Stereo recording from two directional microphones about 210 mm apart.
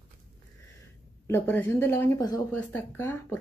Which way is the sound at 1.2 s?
10° left (ahead or behind).